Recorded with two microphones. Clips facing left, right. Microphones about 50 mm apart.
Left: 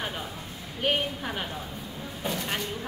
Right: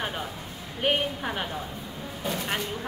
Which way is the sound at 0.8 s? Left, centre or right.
Centre.